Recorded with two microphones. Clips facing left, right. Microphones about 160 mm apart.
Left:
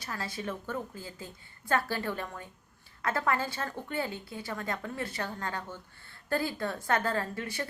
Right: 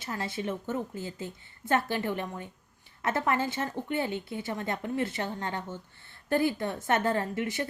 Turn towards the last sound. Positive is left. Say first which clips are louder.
# right 4 dB
turn(degrees=-20)  # may be behind; listen again after turning